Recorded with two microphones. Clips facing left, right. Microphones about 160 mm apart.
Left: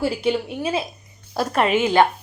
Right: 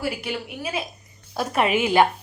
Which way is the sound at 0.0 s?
25° left (ahead or behind).